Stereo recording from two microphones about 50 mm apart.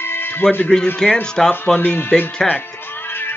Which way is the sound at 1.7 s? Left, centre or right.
Left.